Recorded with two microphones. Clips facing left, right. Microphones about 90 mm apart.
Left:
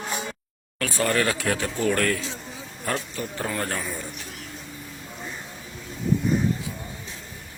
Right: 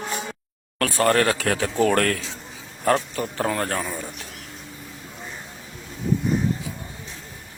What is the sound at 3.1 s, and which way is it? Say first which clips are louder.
Speech: right 5 dB; 55° right (ahead or behind).